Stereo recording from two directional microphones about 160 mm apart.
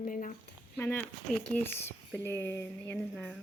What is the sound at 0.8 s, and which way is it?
Speech, 15° left (ahead or behind).